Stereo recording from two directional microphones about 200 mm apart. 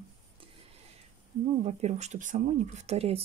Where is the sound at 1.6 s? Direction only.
35° right (ahead or behind).